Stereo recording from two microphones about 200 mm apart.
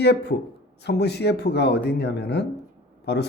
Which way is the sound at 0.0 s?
55° left (ahead or behind).